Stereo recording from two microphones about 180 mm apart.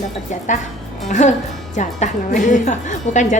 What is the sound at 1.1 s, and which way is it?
A woman's voice, 40° left (ahead or behind).